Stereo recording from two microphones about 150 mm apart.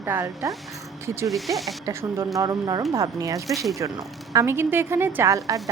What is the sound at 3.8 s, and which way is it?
A woman's voice, 20° right (ahead or behind).